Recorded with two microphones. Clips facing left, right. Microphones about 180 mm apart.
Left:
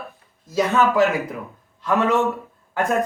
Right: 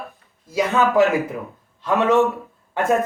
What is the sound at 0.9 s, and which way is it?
Speech, 15° right (ahead or behind).